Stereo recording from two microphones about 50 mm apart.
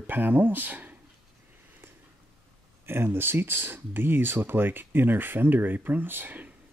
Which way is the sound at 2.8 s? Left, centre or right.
Right.